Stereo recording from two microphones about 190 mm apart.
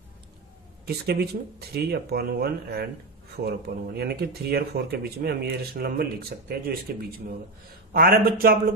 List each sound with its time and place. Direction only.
0.8 s speech: 55° right (ahead or behind)
7.9 s a man's voice: 50° right (ahead or behind)